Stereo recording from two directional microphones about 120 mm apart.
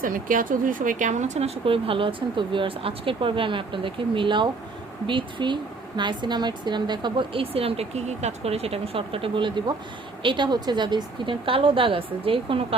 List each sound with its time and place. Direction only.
0.6 s speech: 90° right; by 12.6 s 50° right (ahead or behind)